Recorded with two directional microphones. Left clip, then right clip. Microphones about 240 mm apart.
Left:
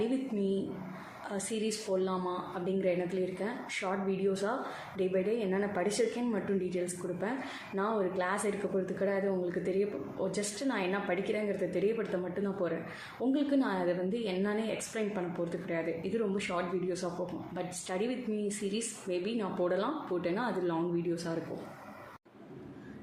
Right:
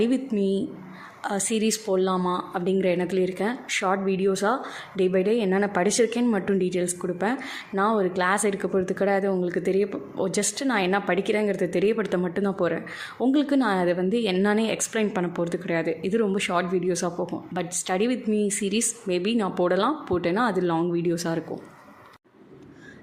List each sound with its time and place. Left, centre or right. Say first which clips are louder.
0.3 s a woman's voice: right 8 dB; right